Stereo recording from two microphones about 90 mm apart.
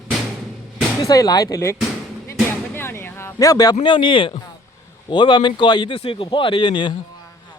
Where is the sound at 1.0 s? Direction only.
40° left (ahead or behind).